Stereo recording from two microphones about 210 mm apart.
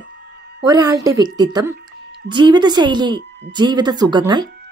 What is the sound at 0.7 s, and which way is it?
A woman's voice, 20° right (ahead or behind).